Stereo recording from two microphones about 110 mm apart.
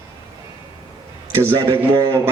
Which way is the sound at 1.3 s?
30° right (ahead or behind).